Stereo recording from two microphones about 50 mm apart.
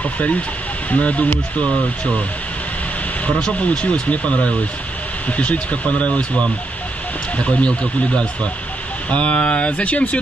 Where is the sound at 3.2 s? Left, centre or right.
Left.